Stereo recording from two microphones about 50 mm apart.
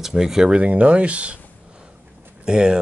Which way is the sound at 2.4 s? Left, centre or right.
Centre.